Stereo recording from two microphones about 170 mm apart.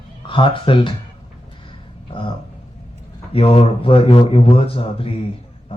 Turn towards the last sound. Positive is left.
turn(degrees=35)  # may be behind; listen again after turning